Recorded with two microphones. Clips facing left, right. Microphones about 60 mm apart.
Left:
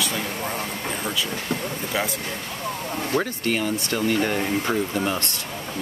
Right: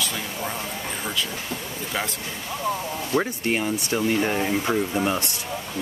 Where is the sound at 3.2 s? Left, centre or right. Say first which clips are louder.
Even; right.